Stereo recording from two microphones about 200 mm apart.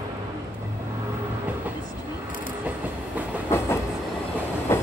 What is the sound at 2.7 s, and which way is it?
Train, 5° right (ahead or behind).